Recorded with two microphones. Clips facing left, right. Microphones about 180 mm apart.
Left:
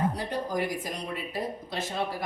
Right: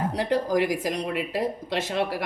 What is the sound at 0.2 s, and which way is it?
Speech, 90° right.